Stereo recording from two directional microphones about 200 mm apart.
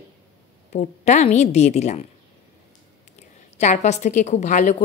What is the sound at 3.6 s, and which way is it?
A woman's voice, 35° left (ahead or behind).